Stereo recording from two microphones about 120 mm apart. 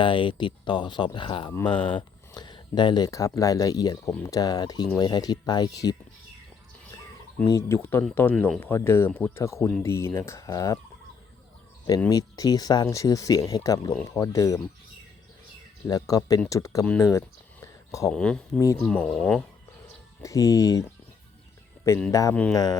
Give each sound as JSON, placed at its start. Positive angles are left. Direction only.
{"t": 0.0, "sound": "speech", "side_deg": 45}
{"t": 7.4, "sound": "speech", "side_deg": 30}
{"t": 7.8, "sound": "speech", "side_deg": 20}
{"t": 12.0, "sound": "speech", "side_deg": 30}
{"t": 15.9, "sound": "speech", "side_deg": 30}
{"t": 17.0, "sound": "a sound", "side_deg": 25}
{"t": 18.1, "sound": "speech", "side_deg": 5}
{"t": 20.2, "sound": "speech", "side_deg": 30}
{"t": 22.1, "sound": "speech", "side_deg": 25}